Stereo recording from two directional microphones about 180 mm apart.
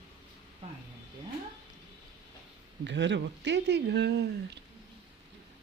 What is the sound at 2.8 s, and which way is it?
Speech, 80° right.